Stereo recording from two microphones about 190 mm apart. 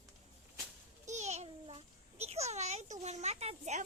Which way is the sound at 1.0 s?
35° right (ahead or behind).